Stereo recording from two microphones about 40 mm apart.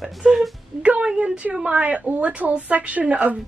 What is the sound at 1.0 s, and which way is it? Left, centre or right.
A woman's voice, right.